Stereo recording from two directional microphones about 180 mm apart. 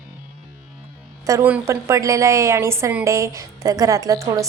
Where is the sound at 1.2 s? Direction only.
15° right (ahead or behind).